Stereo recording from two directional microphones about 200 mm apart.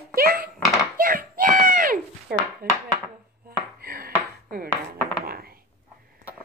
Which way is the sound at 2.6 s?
45° right (ahead or behind).